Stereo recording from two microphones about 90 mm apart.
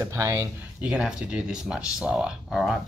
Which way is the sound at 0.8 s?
15° right (ahead or behind).